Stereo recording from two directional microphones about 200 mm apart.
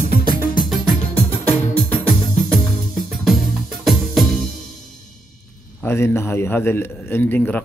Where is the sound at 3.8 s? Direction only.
Centre (ahead or behind).